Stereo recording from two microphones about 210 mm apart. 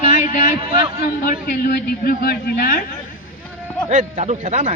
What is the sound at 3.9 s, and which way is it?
Speech, 35° right (ahead or behind).